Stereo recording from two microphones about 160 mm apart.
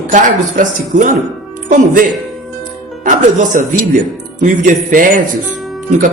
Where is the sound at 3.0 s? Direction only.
55° right (ahead or behind).